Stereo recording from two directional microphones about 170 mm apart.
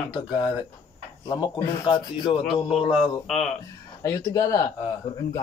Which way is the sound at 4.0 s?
20° left (ahead or behind).